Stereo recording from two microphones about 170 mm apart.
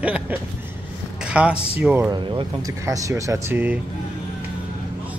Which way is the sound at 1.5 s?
35° left (ahead or behind).